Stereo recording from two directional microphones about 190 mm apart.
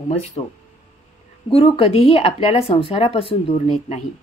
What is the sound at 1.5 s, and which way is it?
A woman's voice, 30° left (ahead or behind).